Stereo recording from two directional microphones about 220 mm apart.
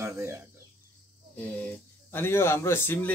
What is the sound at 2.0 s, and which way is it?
A man's voice, 10° left (ahead or behind).